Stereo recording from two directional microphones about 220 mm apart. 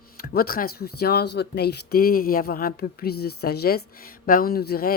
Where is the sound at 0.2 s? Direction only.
40° left (ahead or behind).